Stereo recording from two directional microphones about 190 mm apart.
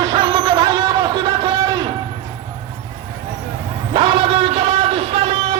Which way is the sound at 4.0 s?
25° right (ahead or behind).